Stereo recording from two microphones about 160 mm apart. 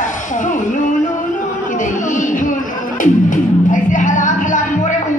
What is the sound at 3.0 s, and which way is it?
Music, 55° left (ahead or behind).